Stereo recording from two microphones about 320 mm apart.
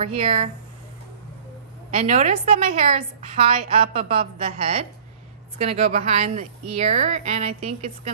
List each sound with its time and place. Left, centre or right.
0.0 s a woman's voice: centre
1.9 s a woman's voice: right